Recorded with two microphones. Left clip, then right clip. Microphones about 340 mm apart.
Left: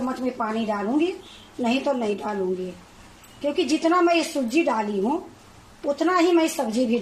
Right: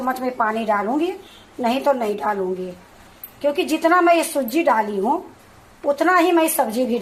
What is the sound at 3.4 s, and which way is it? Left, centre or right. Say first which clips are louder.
A woman's voice: right 4 dB; right.